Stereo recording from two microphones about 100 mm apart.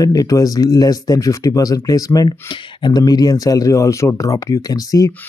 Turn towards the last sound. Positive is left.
turn(degrees=35)  # may be behind; listen again after turning